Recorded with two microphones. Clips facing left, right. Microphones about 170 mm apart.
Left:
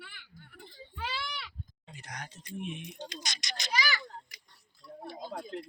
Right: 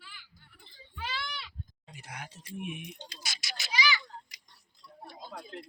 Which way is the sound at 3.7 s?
50° left (ahead or behind).